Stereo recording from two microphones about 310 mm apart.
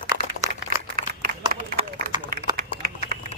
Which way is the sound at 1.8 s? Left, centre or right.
Right.